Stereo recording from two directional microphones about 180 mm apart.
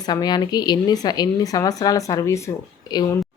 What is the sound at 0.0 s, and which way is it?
A woman's voice, 20° left (ahead or behind).